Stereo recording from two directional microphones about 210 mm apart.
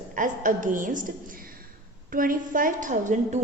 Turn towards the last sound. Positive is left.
turn(degrees=-35)  # may be behind; listen again after turning